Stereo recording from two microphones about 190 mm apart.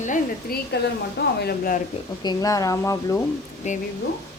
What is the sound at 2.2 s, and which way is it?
Speech, 20° left (ahead or behind).